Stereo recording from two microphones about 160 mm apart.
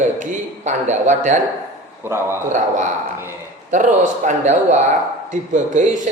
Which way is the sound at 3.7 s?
50° right (ahead or behind).